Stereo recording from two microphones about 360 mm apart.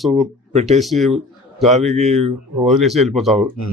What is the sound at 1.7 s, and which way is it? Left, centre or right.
A man's voice, centre.